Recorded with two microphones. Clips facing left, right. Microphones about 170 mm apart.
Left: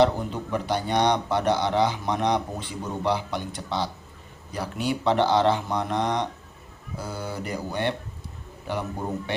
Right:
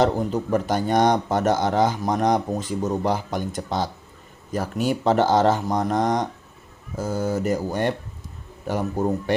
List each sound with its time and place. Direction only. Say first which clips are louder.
0.0 s a man's voice: right 1 dB; 45° right (ahead or behind)